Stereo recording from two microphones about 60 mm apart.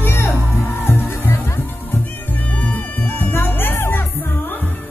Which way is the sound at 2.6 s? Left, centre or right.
Left.